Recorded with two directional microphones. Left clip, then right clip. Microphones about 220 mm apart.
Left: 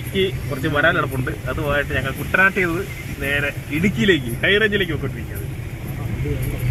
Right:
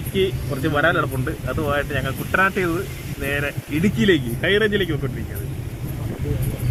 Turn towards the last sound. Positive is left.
turn(degrees=-20)  # may be behind; listen again after turning